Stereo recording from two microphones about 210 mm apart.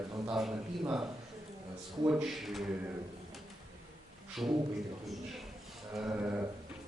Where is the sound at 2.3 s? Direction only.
Centre (ahead or behind).